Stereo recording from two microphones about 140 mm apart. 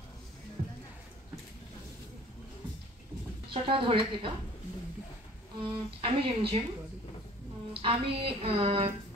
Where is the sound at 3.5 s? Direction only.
40° right (ahead or behind).